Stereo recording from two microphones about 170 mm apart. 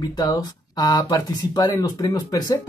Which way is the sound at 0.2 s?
20° left (ahead or behind).